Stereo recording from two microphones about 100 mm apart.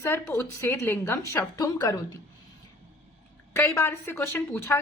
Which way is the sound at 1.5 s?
40° left (ahead or behind).